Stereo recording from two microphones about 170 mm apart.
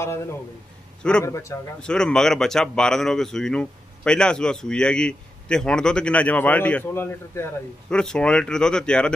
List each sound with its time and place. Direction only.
1.2 s a man's voice: 15° left (ahead or behind)
1.8 s speech: 5° left (ahead or behind)